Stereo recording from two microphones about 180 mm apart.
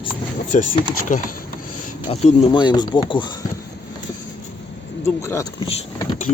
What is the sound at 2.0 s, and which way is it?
Speech, 30° left (ahead or behind).